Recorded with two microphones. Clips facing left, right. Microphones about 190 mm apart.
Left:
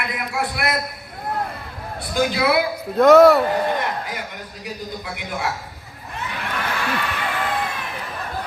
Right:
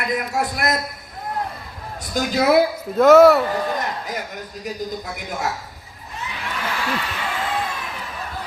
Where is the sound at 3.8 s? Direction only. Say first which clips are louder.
Left 1 dB; 40° right (ahead or behind).